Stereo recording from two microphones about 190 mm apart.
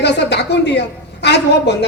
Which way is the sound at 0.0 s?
65° left (ahead or behind).